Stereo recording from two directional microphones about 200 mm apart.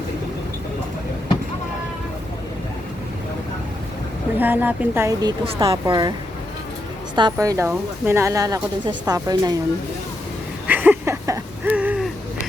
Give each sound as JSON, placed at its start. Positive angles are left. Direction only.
{"t": 4.4, "sound": "speech", "side_deg": -10}
{"t": 5.5, "sound": "speech", "side_deg": -25}
{"t": 7.2, "sound": "speech", "side_deg": -20}
{"t": 10.7, "sound": "a sound", "side_deg": -10}